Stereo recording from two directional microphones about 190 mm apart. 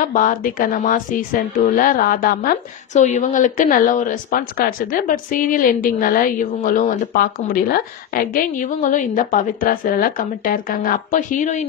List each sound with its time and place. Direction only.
0.0 s speech: 45° left (ahead or behind)